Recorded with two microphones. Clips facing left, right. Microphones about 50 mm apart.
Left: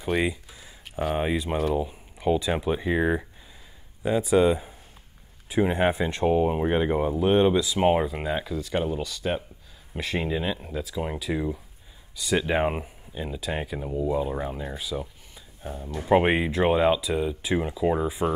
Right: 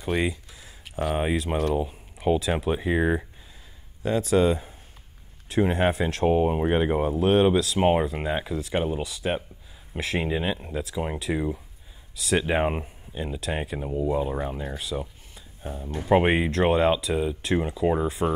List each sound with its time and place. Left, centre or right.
0.0 s speech: centre
4.0 s speech: centre
6.2 s speech: centre
14.8 s a sound: centre
15.6 s speech: right
16.1 s speech: centre